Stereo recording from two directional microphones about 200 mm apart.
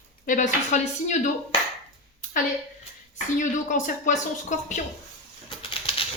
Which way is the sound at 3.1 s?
40° left (ahead or behind).